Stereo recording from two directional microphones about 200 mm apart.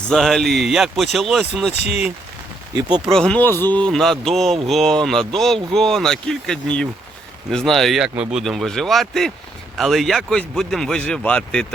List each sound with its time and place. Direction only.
0.1 s a man's voice: centre (ahead or behind)
2.7 s speech: 20° right (ahead or behind)
3.2 s a man's voice: 5° left (ahead or behind)